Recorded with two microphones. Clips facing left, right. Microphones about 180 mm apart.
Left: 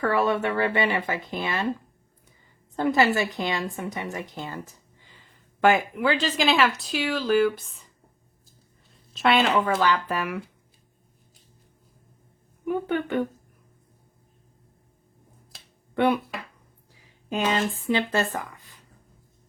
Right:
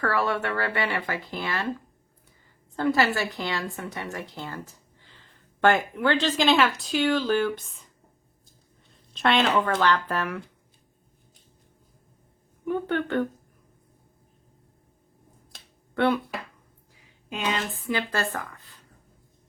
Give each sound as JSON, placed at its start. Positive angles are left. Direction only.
{"t": 0.0, "sound": "speech", "side_deg": 20}
{"t": 2.7, "sound": "a woman's voice", "side_deg": 20}
{"t": 8.9, "sound": "a woman's voice", "side_deg": 5}
{"t": 12.6, "sound": "a woman's voice", "side_deg": 10}
{"t": 16.0, "sound": "a woman's voice", "side_deg": 15}
{"t": 17.3, "sound": "speech", "side_deg": 45}
{"t": 17.8, "sound": "speech", "side_deg": 25}